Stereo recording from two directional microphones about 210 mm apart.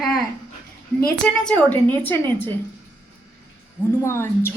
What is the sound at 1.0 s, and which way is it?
A woman's voice, 5° left (ahead or behind).